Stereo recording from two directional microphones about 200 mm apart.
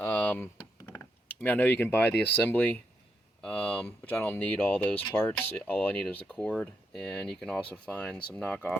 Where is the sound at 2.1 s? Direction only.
60° left (ahead or behind).